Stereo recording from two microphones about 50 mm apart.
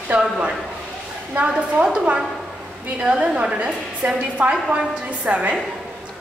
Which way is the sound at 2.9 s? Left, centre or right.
Right.